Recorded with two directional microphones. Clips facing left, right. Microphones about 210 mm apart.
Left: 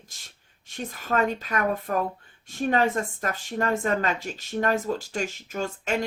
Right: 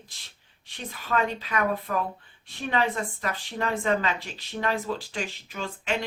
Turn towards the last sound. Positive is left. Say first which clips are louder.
# left 5 dB
turn(degrees=45)  # may be behind; listen again after turning